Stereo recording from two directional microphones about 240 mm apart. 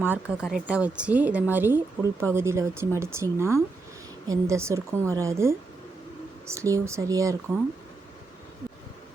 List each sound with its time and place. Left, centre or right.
0.0 s speech: centre